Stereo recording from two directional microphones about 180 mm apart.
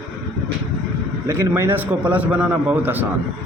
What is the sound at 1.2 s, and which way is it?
A man's voice, 15° right (ahead or behind).